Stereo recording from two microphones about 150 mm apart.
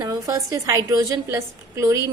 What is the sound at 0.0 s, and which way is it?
A woman's voice, 20° right (ahead or behind).